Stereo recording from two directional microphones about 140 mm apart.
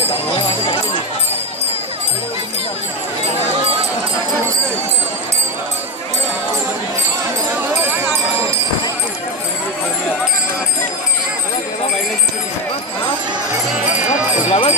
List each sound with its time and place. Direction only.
0.3 s jingle bell: 40° left (ahead or behind)
7.7 s music: 15° right (ahead or behind)
14.0 s a sound: 45° left (ahead or behind)